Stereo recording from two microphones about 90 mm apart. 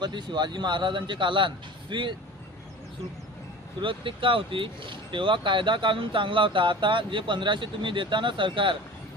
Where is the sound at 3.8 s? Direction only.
70° right (ahead or behind).